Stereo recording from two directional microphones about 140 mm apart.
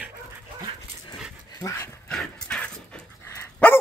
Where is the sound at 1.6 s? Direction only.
20° left (ahead or behind).